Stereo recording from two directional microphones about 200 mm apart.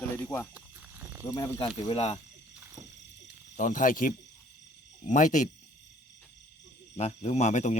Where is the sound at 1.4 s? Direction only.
20° left (ahead or behind).